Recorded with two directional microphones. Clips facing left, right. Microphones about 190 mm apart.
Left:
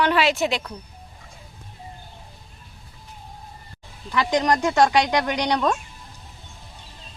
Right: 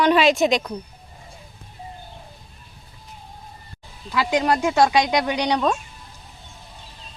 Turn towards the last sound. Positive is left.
turn(degrees=-10)  # may be behind; listen again after turning